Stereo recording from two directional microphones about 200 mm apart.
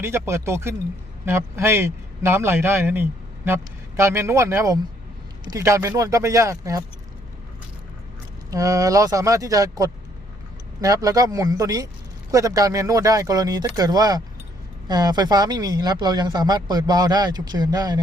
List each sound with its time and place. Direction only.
0.0 s a man's voice: 15° right (ahead or behind)
8.4 s a man's voice: 15° right (ahead or behind)